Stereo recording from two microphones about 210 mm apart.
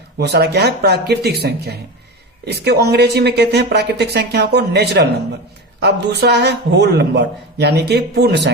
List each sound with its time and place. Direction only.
0.2 s a man's voice: 50° right (ahead or behind)